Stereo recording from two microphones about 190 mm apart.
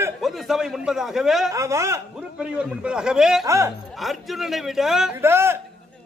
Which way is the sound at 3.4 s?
15° right (ahead or behind).